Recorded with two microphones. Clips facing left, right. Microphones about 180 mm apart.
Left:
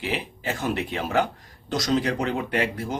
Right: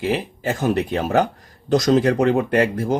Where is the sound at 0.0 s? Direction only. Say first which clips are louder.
Right 7 dB; 40° right (ahead or behind).